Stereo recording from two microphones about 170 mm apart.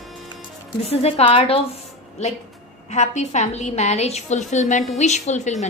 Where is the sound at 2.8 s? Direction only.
45° left (ahead or behind).